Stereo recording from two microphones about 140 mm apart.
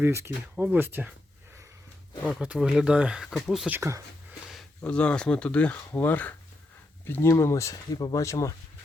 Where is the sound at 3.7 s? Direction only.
20° right (ahead or behind).